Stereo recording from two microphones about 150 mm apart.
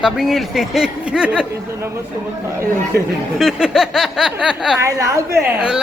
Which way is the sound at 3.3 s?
5° right (ahead or behind).